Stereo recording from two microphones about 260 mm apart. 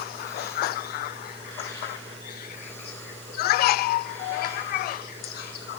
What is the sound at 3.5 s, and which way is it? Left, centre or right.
Children playing, left.